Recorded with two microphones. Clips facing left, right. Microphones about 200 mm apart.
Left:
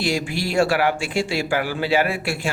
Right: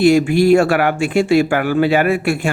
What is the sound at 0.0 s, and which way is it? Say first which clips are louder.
Speech: right 12 dB; 55° right (ahead or behind).